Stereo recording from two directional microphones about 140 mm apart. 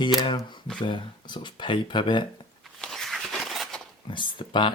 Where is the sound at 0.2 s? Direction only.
30° left (ahead or behind).